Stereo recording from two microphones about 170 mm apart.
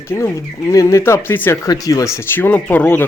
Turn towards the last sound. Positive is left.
turn(degrees=10)  # may be behind; listen again after turning